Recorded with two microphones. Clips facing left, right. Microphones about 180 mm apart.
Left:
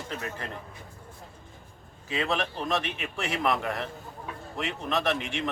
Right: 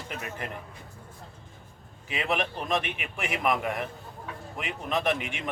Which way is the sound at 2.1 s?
20° right (ahead or behind).